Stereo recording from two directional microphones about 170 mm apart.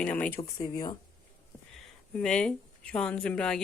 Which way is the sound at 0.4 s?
20° left (ahead or behind).